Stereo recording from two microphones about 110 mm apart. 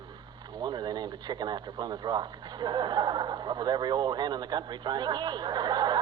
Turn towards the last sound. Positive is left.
turn(degrees=-40)  # may be behind; listen again after turning